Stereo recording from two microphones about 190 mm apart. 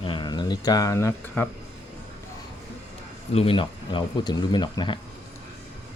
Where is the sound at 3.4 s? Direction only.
25° left (ahead or behind).